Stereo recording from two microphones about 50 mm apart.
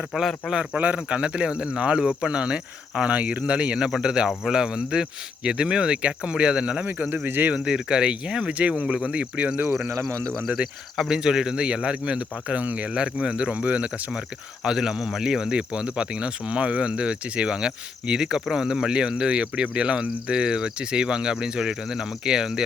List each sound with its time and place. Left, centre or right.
0.1 s speech: centre
0.5 s speech: right
6.8 s speech: right
7.5 s speech: centre
9.9 s speech: right
10.3 s speech: centre; by 14.2 s right
14.6 s speech: centre